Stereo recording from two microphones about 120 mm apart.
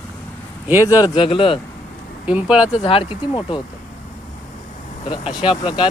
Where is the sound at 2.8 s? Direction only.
50° left (ahead or behind).